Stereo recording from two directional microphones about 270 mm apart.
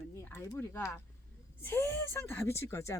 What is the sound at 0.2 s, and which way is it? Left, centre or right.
A woman's voice, centre.